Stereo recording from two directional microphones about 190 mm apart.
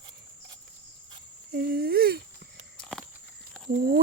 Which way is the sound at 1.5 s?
55° right (ahead or behind).